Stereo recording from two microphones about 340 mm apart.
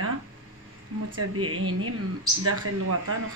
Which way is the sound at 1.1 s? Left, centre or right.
Right.